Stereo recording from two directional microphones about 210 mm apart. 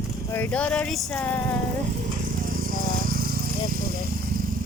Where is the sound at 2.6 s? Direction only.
45° right (ahead or behind).